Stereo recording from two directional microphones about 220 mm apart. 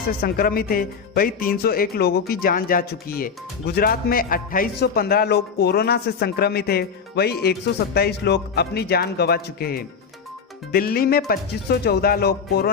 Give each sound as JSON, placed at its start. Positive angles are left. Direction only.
{"t": 0.2, "sound": "speech", "side_deg": 40}